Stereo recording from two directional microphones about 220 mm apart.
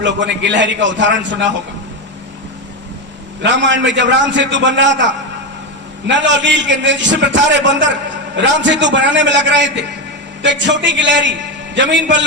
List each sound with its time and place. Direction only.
0.0 s a man's voice: 55° right (ahead or behind)
3.4 s a man's voice: 55° right (ahead or behind)